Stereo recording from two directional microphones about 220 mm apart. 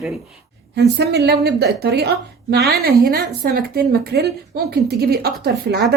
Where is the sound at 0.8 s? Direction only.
50° right (ahead or behind).